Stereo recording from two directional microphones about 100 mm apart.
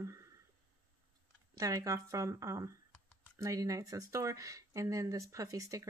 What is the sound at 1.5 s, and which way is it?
A woman's voice, 35° right (ahead or behind).